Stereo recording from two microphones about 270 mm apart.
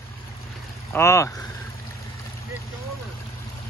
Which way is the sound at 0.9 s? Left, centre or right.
Centre.